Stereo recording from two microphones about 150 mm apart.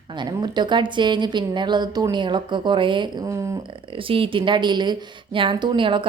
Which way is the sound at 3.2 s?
20° right (ahead or behind).